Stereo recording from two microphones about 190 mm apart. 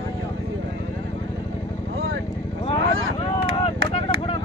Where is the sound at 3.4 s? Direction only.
90° right.